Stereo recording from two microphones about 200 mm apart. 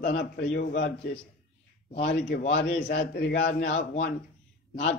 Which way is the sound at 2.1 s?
55° left (ahead or behind).